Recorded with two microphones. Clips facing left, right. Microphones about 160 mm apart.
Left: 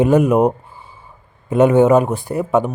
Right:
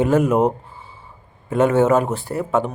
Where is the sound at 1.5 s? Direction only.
15° left (ahead or behind).